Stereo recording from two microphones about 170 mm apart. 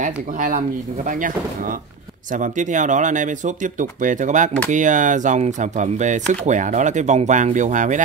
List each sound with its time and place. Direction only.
0.0 s speech: 50° right (ahead or behind)